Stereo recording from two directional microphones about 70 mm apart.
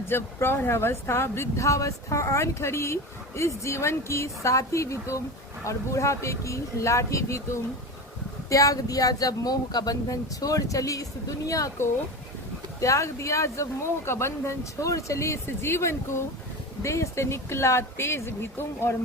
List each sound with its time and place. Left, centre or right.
0.1 s speech: left
12.8 s speech: left
15.4 s speech: left